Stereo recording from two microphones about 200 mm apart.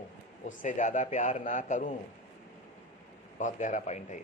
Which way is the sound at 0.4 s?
40° left (ahead or behind).